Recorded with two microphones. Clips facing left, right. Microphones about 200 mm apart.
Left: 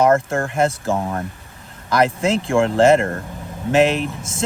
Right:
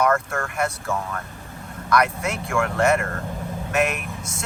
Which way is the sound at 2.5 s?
30° left (ahead or behind).